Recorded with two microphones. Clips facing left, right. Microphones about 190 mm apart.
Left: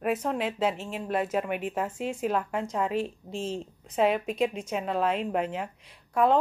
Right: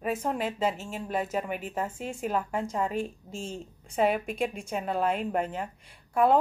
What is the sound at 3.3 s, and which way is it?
Speech, 35° left (ahead or behind).